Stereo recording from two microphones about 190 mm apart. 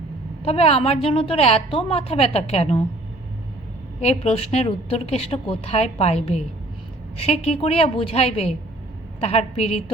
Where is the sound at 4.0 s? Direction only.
35° left (ahead or behind).